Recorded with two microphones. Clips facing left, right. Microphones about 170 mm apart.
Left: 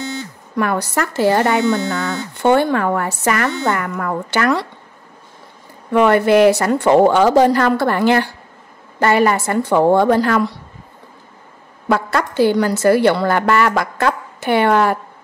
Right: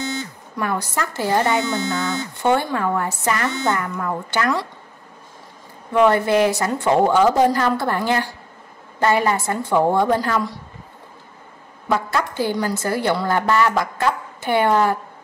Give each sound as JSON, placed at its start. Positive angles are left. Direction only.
{"t": 0.0, "sound": "a sound", "side_deg": -15}
{"t": 0.6, "sound": "a woman's voice", "side_deg": 70}
{"t": 5.9, "sound": "a woman's voice", "side_deg": 70}
{"t": 11.9, "sound": "a woman's voice", "side_deg": 75}